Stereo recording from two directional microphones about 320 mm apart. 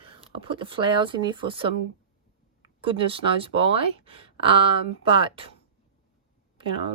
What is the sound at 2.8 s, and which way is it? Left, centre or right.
Speech, centre.